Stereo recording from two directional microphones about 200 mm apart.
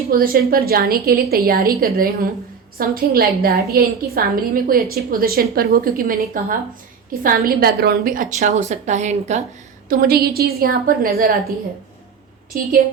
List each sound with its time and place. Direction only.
0.1 s a woman's voice: 45° right (ahead or behind)
9.9 s a woman's voice: 50° right (ahead or behind)
12.5 s a woman's voice: 45° right (ahead or behind)